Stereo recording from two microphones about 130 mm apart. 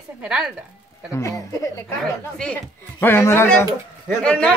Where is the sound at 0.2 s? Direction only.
5° right (ahead or behind).